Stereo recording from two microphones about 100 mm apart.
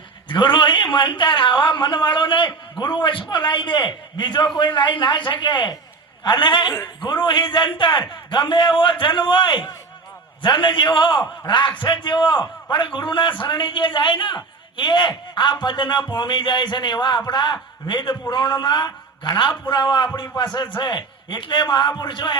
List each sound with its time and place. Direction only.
0.3 s a man's voice: 55° left (ahead or behind)